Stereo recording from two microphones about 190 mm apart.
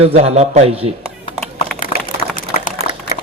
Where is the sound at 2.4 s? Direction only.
45° left (ahead or behind).